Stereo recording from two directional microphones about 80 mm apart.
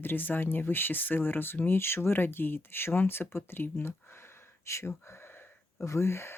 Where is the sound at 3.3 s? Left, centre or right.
Left.